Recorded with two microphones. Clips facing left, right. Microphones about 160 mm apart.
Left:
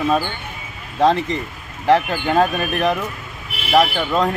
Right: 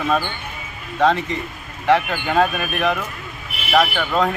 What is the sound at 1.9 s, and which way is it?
Speech, 35° left (ahead or behind).